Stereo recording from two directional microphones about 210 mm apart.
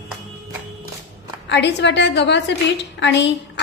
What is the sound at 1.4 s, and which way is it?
A woman's voice, 55° left (ahead or behind).